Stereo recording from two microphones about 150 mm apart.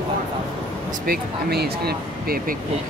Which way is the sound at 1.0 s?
90° right.